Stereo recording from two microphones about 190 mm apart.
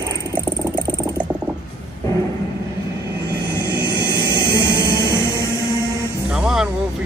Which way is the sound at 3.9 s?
20° right (ahead or behind).